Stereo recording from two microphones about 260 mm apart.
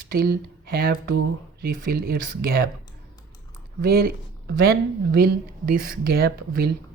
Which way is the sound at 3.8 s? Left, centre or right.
Right.